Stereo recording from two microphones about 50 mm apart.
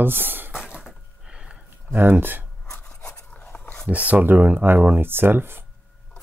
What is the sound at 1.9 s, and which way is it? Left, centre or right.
Speech, right.